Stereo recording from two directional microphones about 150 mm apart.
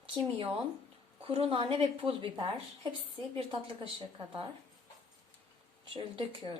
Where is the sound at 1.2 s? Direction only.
35° right (ahead or behind).